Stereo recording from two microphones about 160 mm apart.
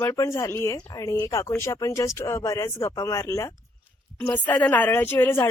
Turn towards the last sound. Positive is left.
turn(degrees=15)  # may be behind; listen again after turning